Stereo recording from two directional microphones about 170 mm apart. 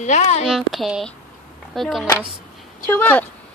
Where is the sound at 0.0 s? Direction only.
45° left (ahead or behind).